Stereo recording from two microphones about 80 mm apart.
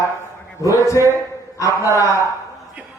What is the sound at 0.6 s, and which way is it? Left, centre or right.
A man's voice, left.